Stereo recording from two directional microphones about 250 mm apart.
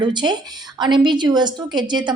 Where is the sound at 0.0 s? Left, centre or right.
Centre.